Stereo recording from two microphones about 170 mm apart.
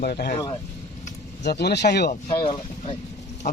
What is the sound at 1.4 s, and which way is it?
Speech, 75° left (ahead or behind).